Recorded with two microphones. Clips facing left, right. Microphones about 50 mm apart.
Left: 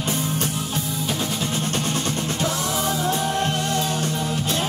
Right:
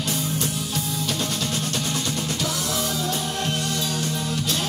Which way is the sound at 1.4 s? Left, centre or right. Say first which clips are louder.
Left 2 dB; left.